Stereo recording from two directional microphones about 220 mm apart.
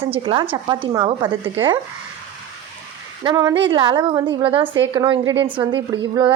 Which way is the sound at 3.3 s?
20° right (ahead or behind).